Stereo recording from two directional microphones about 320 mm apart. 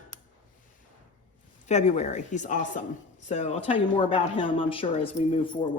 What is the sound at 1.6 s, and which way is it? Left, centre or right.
Speech, left.